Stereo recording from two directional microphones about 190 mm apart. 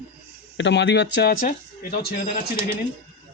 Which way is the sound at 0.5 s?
70° left (ahead or behind).